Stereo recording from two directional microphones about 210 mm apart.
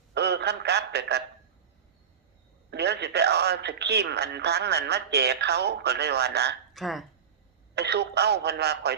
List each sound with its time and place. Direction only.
0.1 s a sound: 55° right (ahead or behind)
2.6 s speech: 55° right (ahead or behind)
6.7 s speech: centre (ahead or behind)
7.8 s speech: 50° right (ahead or behind)